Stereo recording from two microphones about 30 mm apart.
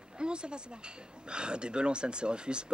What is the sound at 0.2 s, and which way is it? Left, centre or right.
Speech, right.